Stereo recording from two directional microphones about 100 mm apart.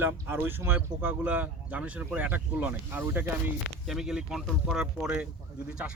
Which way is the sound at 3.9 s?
5° right (ahead or behind).